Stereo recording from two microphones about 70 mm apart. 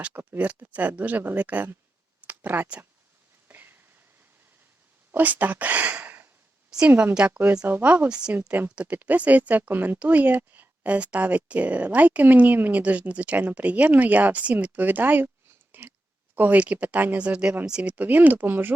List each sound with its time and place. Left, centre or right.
0.2 s speech: right
3.5 s a sound: right
5.1 s a woman's voice: right
7.7 s speech: right
15.7 s a sound: right
16.3 s speech: right
17.9 s speech: right